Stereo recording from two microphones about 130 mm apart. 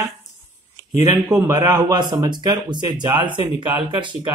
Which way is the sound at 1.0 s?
30° right (ahead or behind).